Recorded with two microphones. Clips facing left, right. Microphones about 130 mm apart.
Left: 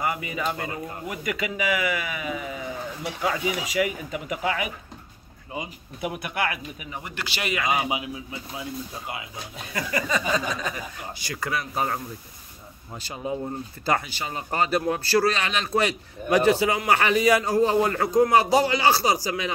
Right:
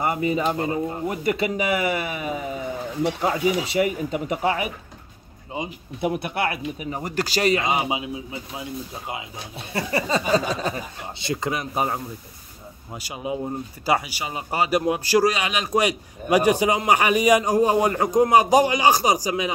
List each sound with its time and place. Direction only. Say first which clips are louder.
0.0 s speech: right 5 dB; 35° right (ahead or behind)
5.5 s speech: right 4 dB; 25° right (ahead or behind)
7.6 s speech: right 2 dB; 25° right (ahead or behind)